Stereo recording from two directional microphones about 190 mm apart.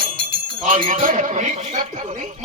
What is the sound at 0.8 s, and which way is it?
Speech, 45° right (ahead or behind).